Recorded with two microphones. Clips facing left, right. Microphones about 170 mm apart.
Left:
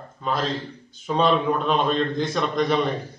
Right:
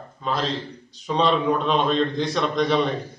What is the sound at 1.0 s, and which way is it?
A man's voice, 5° left (ahead or behind).